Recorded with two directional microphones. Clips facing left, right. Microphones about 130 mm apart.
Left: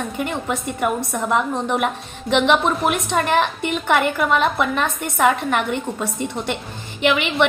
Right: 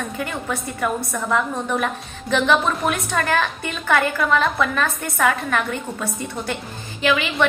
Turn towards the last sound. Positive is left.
turn(degrees=25)  # may be behind; listen again after turning